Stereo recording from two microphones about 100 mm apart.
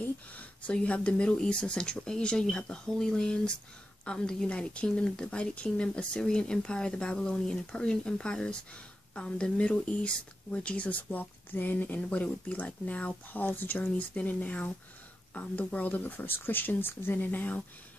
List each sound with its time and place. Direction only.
0.0 s speech: 15° left (ahead or behind)